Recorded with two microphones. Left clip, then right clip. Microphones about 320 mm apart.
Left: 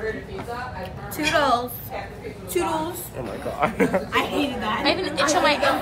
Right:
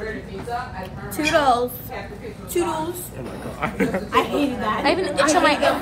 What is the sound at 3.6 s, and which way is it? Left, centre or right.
Speech, centre.